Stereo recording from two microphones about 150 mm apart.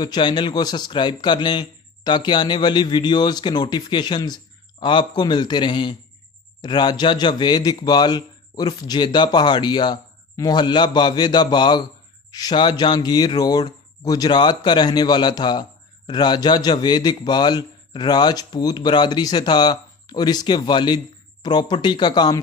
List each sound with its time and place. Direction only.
0.0 s a man's voice: 30° left (ahead or behind)